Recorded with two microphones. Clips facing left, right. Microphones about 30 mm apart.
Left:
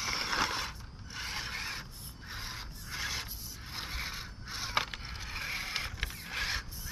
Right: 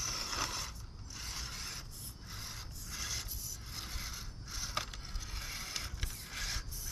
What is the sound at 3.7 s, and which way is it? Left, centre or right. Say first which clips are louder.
Scrape: left 8 dB; left.